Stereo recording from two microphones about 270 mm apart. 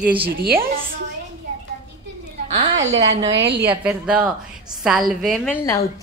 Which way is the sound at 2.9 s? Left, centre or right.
Centre.